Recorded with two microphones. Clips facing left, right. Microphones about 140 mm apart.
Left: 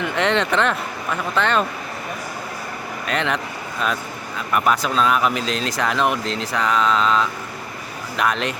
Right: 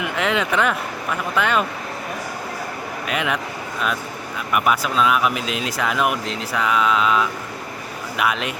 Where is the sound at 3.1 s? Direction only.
5° right (ahead or behind).